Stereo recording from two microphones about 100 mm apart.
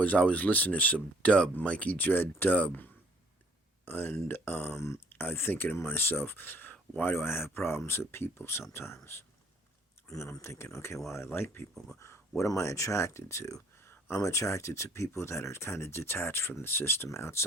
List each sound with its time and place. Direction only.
0.0 s speech: 15° left (ahead or behind)
10.1 s speech: 30° left (ahead or behind)